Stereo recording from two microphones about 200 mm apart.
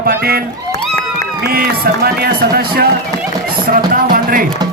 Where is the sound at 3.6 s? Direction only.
45° right (ahead or behind).